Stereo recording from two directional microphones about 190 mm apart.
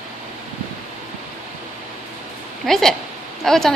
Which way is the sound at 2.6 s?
Centre (ahead or behind).